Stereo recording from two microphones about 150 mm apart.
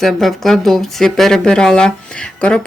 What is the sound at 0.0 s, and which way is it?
Speech, centre (ahead or behind).